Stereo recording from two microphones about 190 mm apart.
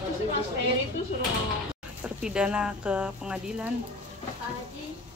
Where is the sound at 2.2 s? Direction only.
5° right (ahead or behind).